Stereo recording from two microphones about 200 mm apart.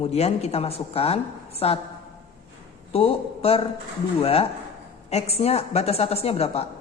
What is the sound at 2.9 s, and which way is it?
A woman's voice, 30° left (ahead or behind).